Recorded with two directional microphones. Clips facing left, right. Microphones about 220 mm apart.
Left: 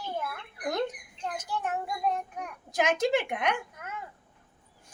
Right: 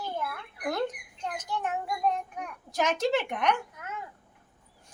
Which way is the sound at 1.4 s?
5° left (ahead or behind).